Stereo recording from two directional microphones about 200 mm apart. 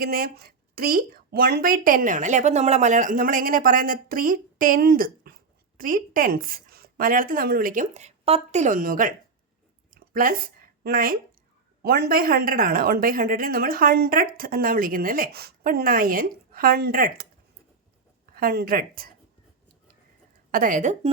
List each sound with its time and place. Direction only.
0.0 s a woman's voice: 50° right (ahead or behind)
18.3 s a woman's voice: 50° right (ahead or behind)
20.5 s a woman's voice: 45° right (ahead or behind)